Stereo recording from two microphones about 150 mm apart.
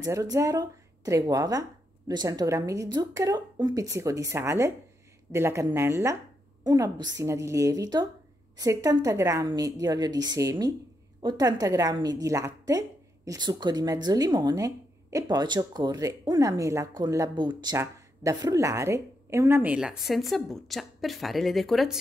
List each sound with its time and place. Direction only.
0.0 s a woman's voice: 25° right (ahead or behind); by 21.9 s centre (ahead or behind)